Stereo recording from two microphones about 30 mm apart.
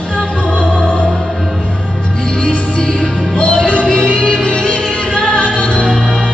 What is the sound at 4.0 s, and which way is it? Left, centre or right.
Music, centre.